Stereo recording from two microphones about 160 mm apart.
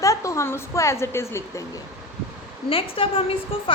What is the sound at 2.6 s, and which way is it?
A woman's voice, 35° left (ahead or behind).